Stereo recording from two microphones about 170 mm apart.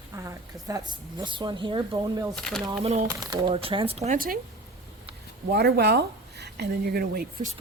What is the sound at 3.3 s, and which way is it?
Speech, 35° right (ahead or behind).